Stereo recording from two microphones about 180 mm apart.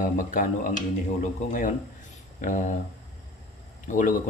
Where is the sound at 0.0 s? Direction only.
45° left (ahead or behind).